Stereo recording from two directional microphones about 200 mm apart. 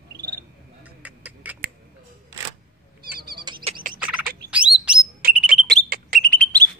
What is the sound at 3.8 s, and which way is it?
Bird, 40° right (ahead or behind).